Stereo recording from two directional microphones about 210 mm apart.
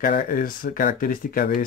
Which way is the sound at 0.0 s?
40° left (ahead or behind).